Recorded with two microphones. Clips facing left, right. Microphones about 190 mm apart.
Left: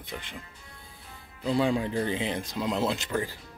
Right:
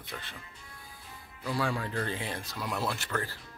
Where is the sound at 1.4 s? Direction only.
20° left (ahead or behind).